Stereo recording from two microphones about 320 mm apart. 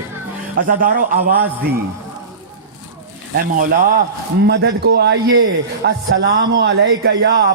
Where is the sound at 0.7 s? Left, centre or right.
Right.